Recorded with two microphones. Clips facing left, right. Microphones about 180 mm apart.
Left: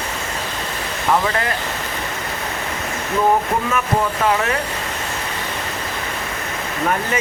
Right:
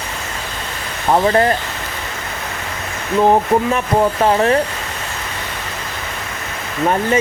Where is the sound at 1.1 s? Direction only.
35° right (ahead or behind).